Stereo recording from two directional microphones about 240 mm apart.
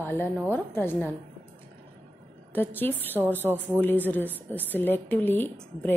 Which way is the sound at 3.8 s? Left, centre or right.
Centre.